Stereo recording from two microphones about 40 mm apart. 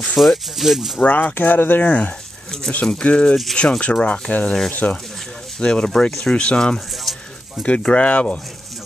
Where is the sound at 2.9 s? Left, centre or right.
Left.